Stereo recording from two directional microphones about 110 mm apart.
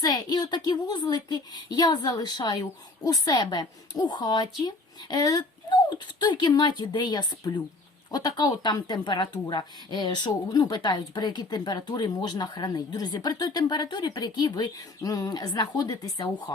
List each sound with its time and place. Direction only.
0.0 s a woman's voice: 40° left (ahead or behind)